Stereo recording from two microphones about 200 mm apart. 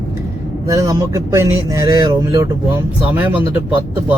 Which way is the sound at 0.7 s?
15° right (ahead or behind).